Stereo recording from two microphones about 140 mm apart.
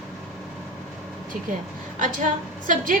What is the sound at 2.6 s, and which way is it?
Speech, 75° right (ahead or behind).